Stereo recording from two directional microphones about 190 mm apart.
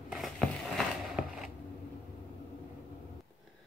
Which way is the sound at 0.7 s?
5° right (ahead or behind).